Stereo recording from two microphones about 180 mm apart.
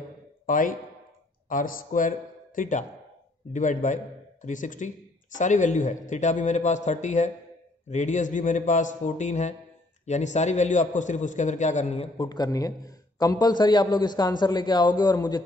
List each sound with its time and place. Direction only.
0.5 s a man's voice: 50° left (ahead or behind)
12.3 s a man's voice: 20° left (ahead or behind)